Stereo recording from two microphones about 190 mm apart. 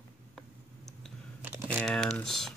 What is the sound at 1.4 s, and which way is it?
Computer keyboard, 10° right (ahead or behind).